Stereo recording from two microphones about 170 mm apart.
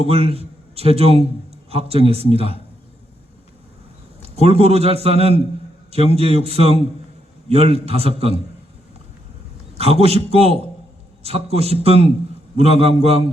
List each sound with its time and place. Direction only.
0.0 s a man's voice: 35° right (ahead or behind)
4.2 s a man's voice: 35° right (ahead or behind)
9.7 s a man's voice: 35° right (ahead or behind)